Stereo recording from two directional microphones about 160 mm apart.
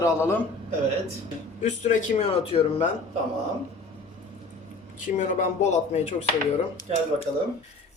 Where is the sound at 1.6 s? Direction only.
50° left (ahead or behind).